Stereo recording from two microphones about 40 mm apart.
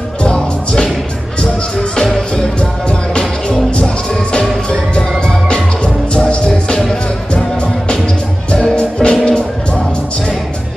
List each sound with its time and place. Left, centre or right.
0.2 s music: centre
2.9 s music: left
6.1 s music: left
8.7 s music: left